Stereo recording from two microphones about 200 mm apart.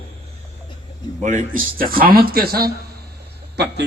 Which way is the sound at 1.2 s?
40° right (ahead or behind).